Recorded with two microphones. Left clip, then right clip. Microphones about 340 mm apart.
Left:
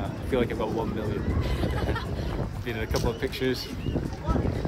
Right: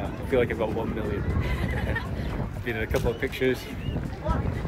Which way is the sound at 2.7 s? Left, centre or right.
Centre.